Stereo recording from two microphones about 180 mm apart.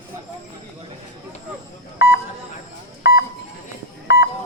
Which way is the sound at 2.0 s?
70° left (ahead or behind).